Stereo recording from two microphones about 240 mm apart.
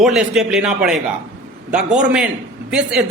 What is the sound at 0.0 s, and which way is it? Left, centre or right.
A man's voice, centre.